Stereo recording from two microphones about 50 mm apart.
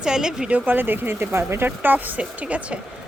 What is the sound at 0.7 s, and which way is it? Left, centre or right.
Speech, right.